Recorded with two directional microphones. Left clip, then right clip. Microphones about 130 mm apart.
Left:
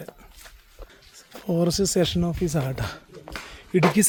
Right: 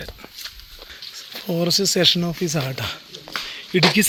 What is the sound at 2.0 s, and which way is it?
Speech, 10° left (ahead or behind).